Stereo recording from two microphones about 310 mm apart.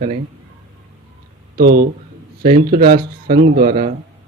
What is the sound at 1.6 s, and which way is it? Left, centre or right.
Speech, right.